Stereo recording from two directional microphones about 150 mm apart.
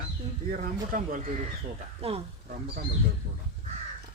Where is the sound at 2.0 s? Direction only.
40° right (ahead or behind).